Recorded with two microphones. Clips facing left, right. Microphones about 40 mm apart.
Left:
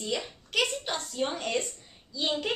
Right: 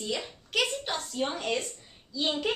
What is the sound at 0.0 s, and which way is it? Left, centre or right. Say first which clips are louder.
A woman's voice: left 1 dB; centre.